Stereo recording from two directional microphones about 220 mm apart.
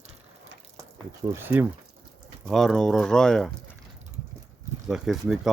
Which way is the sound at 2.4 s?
Centre (ahead or behind).